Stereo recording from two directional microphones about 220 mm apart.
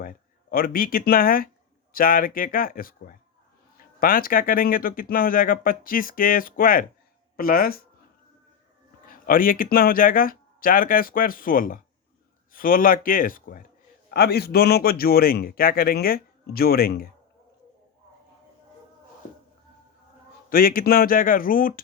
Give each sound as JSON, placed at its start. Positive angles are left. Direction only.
{"t": 0.0, "sound": "a man's voice", "side_deg": 40}
{"t": 9.0, "sound": "a man's voice", "side_deg": 40}
{"t": 20.5, "sound": "speech", "side_deg": 40}